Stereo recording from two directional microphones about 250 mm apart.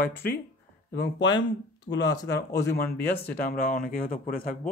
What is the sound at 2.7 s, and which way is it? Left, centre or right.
Speech, left.